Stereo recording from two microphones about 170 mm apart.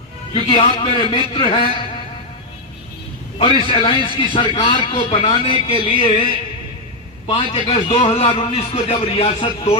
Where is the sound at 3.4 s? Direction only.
35° left (ahead or behind).